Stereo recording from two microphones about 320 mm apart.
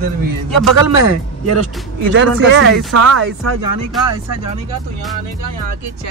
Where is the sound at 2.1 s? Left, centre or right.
Right.